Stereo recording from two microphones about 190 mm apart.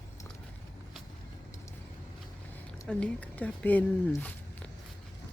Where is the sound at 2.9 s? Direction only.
5° left (ahead or behind).